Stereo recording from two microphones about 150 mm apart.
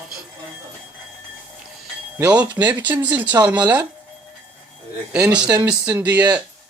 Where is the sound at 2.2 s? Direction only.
10° right (ahead or behind).